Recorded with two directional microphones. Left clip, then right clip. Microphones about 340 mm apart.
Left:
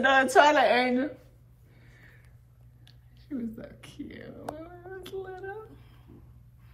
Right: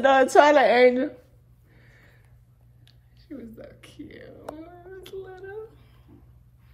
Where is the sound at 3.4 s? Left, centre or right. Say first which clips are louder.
Left 2 dB; centre.